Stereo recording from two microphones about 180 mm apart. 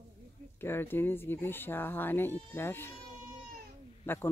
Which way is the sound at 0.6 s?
10° left (ahead or behind).